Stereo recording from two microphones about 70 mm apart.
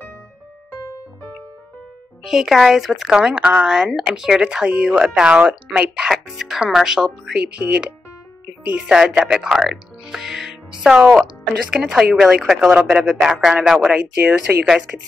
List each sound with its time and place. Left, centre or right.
2.2 s speech: centre
6.0 s speech: centre
13.8 s speech: centre